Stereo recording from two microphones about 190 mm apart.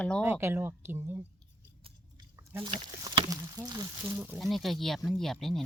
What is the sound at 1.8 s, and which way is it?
Chewing, 20° right (ahead or behind).